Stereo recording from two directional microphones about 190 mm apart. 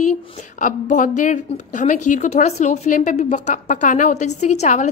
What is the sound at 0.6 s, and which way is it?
A woman's voice, 45° left (ahead or behind).